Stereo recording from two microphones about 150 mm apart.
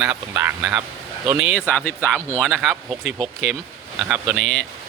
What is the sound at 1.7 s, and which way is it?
Speech, 15° left (ahead or behind).